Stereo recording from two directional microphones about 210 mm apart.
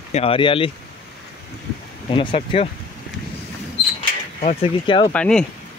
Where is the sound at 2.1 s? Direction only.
25° left (ahead or behind).